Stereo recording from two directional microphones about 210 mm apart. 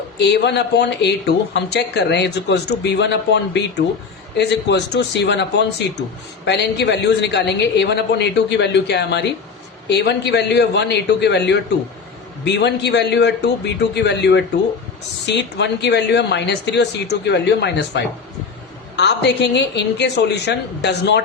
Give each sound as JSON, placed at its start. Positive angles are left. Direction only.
{"t": 0.2, "sound": "speech", "side_deg": 55}